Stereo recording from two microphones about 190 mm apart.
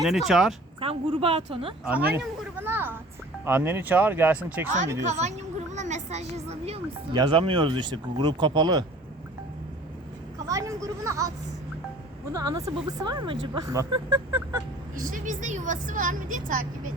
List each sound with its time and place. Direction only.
0.0 s speech: centre (ahead or behind)
0.8 s speech: 30° right (ahead or behind)
2.1 s a sound: 10° right (ahead or behind)
3.4 s speech: 10° right (ahead or behind)
5.0 s a woman's voice: 35° right (ahead or behind)
10.3 s a sound: 15° right (ahead or behind)
12.3 s speech: 20° right (ahead or behind)
14.9 s a woman's voice: 45° right (ahead or behind)